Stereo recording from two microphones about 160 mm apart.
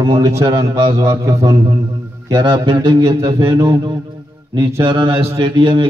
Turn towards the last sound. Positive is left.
turn(degrees=-30)  # may be behind; listen again after turning